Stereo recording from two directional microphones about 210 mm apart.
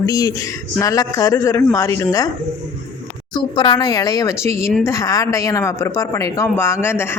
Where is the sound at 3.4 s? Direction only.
20° left (ahead or behind).